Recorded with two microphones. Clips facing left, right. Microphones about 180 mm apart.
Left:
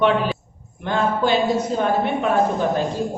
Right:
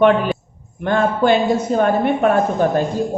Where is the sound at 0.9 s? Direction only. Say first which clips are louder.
Right 4 dB; 55° right (ahead or behind).